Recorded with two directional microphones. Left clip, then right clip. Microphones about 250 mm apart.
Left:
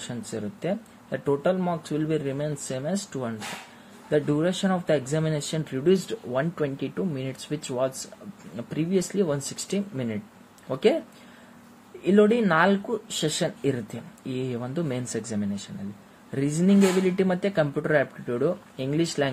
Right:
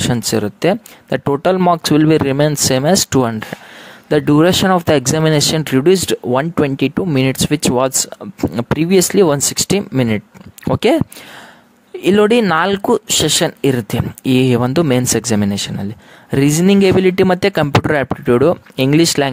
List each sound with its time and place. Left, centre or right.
0.1 s speech: right
12.0 s speech: right